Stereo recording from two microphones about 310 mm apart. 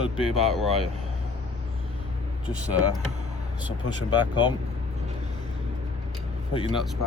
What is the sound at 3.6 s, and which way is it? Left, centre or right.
Speech, centre.